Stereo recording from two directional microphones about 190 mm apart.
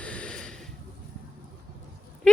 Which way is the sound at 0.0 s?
5° left (ahead or behind).